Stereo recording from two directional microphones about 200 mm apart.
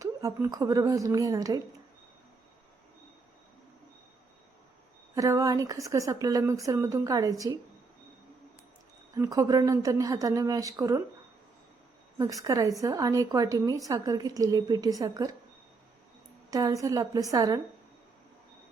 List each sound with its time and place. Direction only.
0.0 s a woman's voice: 15° right (ahead or behind)
5.1 s a woman's voice: 15° right (ahead or behind)
9.1 s a woman's voice: 15° right (ahead or behind)
12.1 s a woman's voice: 15° right (ahead or behind)
16.5 s a woman's voice: 15° right (ahead or behind)